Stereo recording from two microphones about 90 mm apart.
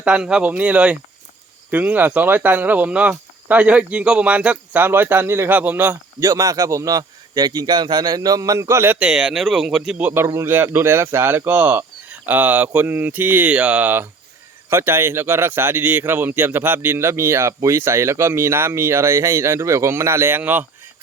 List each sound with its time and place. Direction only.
0.0 s speech: 10° right (ahead or behind)
6.1 s a man's voice: 40° right (ahead or behind)
9.0 s speech: 5° right (ahead or behind)
10.0 s speech: 20° right (ahead or behind)